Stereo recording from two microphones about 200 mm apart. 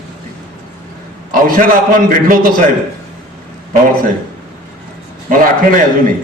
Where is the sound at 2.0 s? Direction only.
45° right (ahead or behind).